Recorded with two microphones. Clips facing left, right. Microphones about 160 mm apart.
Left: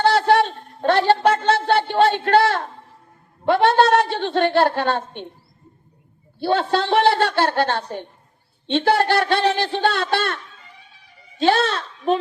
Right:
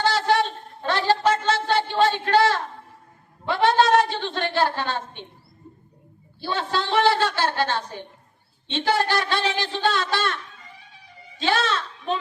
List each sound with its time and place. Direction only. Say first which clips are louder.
0.0 s a sound: left 5 dB; 60° left (ahead or behind)
3.4 s a woman's voice: left 4 dB; 55° left (ahead or behind)
6.4 s a woman's voice: left 7 dB; 55° left (ahead or behind)
11.3 s a woman's voice: left 5 dB; 55° left (ahead or behind)